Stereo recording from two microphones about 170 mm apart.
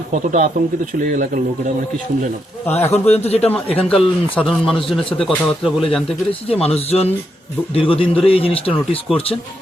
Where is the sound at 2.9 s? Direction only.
35° left (ahead or behind).